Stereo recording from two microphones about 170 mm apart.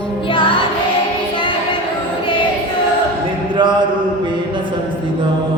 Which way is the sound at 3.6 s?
25° right (ahead or behind).